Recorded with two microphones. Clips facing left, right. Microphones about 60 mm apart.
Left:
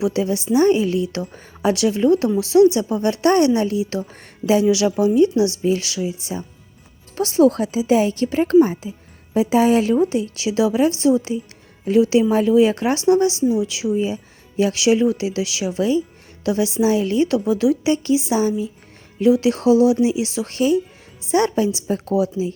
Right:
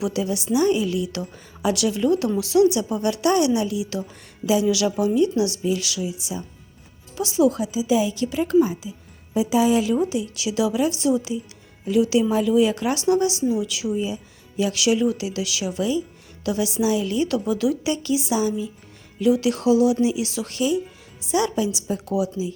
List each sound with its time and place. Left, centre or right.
0.0 s speech: left
4.6 s a woman's voice: left